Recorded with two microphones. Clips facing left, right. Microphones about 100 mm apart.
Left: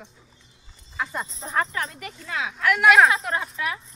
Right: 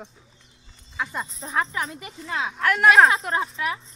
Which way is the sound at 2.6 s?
40° right (ahead or behind).